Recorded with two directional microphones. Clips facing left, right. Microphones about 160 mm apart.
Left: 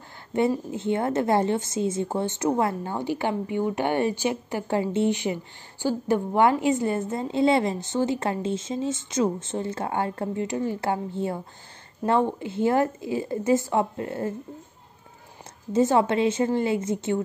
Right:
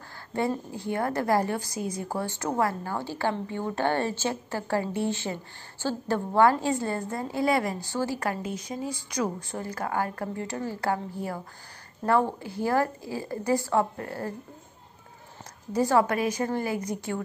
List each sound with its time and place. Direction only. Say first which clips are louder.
0.3 s a woman's voice: left 5 dB; 20° left (ahead or behind)
15.7 s a woman's voice: left 3 dB; 25° left (ahead or behind)